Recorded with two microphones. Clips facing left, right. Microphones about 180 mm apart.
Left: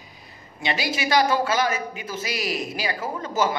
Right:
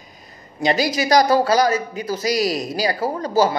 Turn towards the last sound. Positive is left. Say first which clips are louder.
# right 6 dB
turn(degrees=-35)  # may be behind; listen again after turning